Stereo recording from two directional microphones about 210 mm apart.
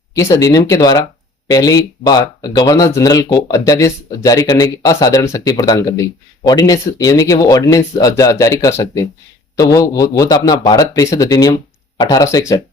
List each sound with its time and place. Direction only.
0.1 s speech: 15° left (ahead or behind)